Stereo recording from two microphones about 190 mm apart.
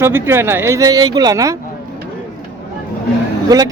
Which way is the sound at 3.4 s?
20° right (ahead or behind).